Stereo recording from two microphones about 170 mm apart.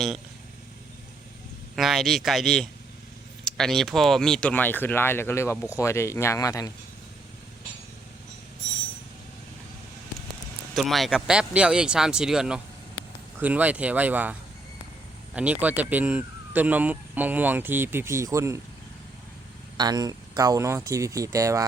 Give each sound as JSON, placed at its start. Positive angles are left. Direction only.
{"t": 1.7, "sound": "speech", "side_deg": 0}
{"t": 10.8, "sound": "speech", "side_deg": 0}
{"t": 15.4, "sound": "speech", "side_deg": -10}
{"t": 19.7, "sound": "speech", "side_deg": -25}